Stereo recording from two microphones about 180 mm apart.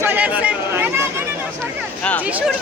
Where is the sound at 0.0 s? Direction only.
10° right (ahead or behind).